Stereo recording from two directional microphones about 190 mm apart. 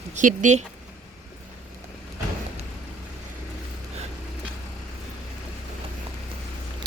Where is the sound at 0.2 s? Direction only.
40° right (ahead or behind).